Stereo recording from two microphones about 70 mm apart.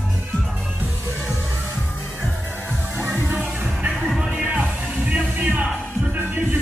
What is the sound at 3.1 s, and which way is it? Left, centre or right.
Music, right.